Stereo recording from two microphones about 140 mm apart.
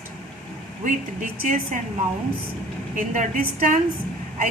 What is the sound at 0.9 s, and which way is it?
Speech, 65° right (ahead or behind).